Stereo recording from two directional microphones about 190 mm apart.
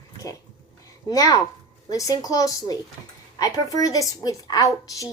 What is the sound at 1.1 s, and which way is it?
A woman's voice, 20° left (ahead or behind).